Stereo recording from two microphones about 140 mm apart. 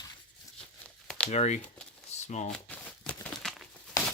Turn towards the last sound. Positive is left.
turn(degrees=5)  # may be behind; listen again after turning